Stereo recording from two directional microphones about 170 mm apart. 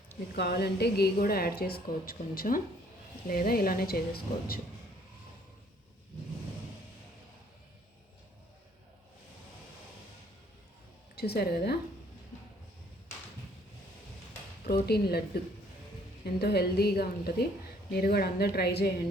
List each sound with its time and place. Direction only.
0.3 s a woman's voice: 75° left (ahead or behind)
11.1 s a woman's voice: 70° left (ahead or behind)
14.8 s a woman's voice: 70° left (ahead or behind)
16.2 s a woman's voice: 70° left (ahead or behind)